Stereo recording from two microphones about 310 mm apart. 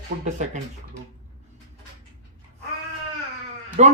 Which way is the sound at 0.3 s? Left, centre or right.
Right.